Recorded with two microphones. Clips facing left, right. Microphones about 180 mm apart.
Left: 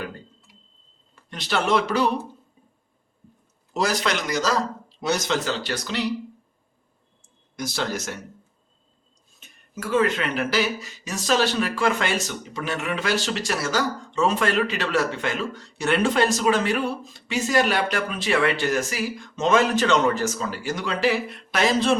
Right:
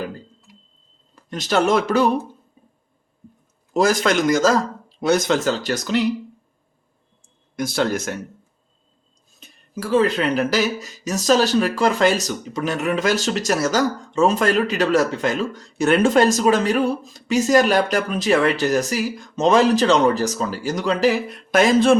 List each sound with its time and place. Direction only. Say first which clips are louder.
1.1 s speech: right 6 dB; 45° right (ahead or behind)
3.8 s speech: right 7 dB; 45° right (ahead or behind)
7.5 s speech: right 7 dB; 55° right (ahead or behind)
9.4 s speech: right 4 dB; 35° right (ahead or behind); by 21.9 s 50° right (ahead or behind)